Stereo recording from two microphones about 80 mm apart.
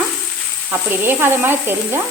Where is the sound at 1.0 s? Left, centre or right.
Right.